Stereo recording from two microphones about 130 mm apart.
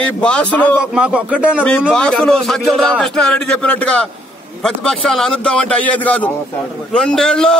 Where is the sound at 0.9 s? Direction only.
10° right (ahead or behind).